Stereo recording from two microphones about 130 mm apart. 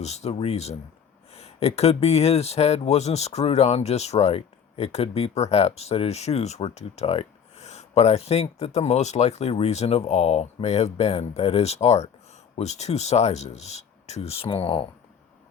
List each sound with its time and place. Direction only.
0.0 s speech: 60° left (ahead or behind)